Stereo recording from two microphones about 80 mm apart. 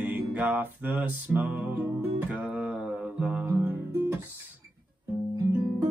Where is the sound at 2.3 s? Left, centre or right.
Centre.